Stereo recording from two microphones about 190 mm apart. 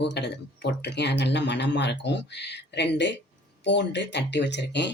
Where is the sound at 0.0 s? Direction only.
65° left (ahead or behind).